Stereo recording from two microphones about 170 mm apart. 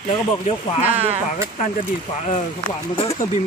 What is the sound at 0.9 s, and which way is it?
Speech, 35° right (ahead or behind).